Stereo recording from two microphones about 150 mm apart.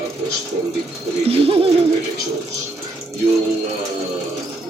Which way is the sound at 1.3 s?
40° right (ahead or behind).